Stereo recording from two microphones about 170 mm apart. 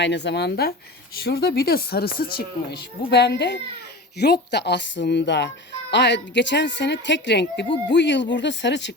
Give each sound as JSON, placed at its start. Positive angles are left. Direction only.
{"t": 0.0, "sound": "a woman's voice", "side_deg": 90}